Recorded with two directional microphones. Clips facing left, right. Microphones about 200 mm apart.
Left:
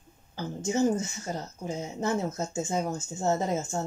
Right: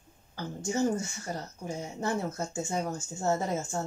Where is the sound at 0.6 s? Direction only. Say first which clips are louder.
Left 3 dB; 20° left (ahead or behind).